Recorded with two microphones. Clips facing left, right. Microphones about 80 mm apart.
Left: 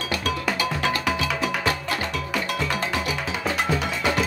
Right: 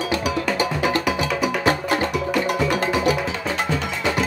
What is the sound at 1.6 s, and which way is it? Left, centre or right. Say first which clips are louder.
Music: right 6 dB; right.